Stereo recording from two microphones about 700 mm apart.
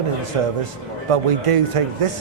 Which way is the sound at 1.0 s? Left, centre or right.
Right.